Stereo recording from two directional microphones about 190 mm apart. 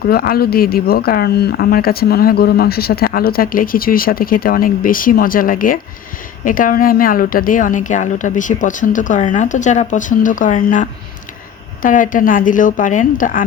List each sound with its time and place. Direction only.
0.0 s speech: 50° left (ahead or behind)